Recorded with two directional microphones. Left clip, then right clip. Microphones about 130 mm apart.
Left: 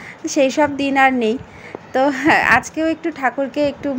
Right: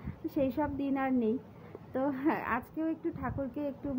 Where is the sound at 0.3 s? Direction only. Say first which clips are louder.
Left 17 dB; 20° left (ahead or behind).